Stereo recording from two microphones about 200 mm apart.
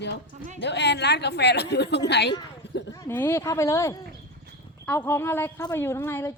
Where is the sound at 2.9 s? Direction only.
10° left (ahead or behind).